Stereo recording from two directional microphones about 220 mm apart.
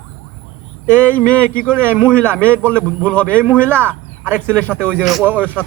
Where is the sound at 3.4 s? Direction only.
10° right (ahead or behind).